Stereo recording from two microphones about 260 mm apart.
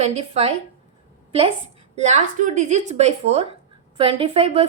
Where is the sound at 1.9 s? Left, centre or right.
Right.